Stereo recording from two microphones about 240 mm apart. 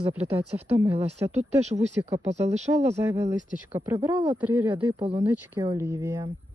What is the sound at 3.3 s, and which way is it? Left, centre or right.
Speech, centre.